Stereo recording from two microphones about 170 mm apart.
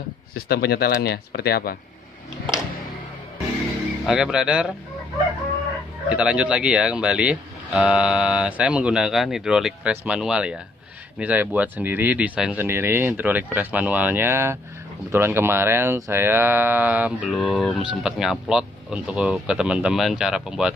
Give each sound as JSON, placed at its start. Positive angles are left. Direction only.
{"t": 0.3, "sound": "speech", "side_deg": 70}
{"t": 4.0, "sound": "speech", "side_deg": -5}
{"t": 6.0, "sound": "speech", "side_deg": -5}